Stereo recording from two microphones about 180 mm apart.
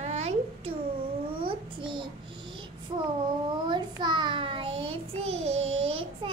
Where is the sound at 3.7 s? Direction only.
25° right (ahead or behind).